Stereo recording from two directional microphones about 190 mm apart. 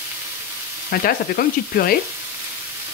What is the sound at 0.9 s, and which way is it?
Speech, 50° left (ahead or behind).